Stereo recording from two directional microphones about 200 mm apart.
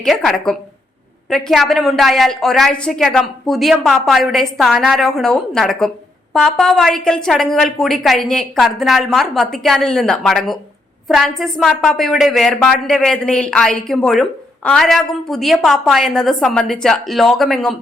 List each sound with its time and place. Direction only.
0.0 s a woman's voice: centre (ahead or behind)